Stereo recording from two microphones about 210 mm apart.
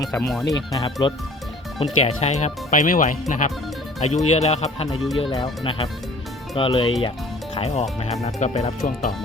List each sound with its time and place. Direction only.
0.1 s speech: 5° left (ahead or behind)
0.7 s speech: 15° left (ahead or behind)
1.8 s speech: 30° left (ahead or behind)